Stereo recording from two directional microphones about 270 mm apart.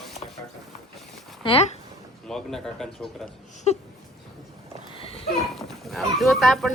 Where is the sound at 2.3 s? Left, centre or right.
Centre.